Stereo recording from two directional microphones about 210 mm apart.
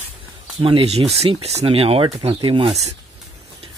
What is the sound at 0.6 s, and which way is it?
Speech, 25° right (ahead or behind).